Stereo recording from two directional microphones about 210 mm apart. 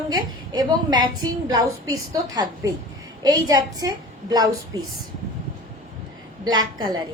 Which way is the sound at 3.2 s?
20° right (ahead or behind).